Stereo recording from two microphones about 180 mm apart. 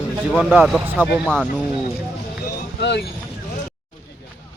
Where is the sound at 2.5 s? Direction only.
65° left (ahead or behind).